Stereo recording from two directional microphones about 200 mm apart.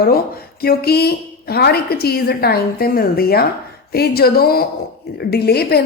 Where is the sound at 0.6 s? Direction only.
50° left (ahead or behind).